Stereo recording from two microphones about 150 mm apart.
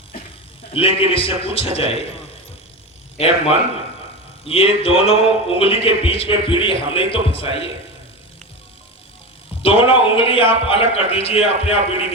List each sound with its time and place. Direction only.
0.7 s a man's voice: 40° left (ahead or behind)
4.4 s a man's voice: 40° left (ahead or behind)
9.6 s a man's voice: 40° left (ahead or behind)